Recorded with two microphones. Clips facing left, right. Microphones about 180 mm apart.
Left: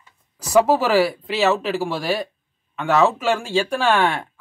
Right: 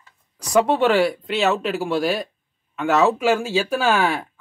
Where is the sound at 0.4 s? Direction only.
5° left (ahead or behind).